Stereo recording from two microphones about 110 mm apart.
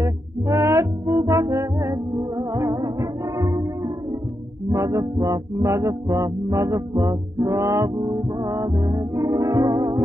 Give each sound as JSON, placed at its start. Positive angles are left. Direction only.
{"t": 0.0, "sound": "music", "side_deg": -30}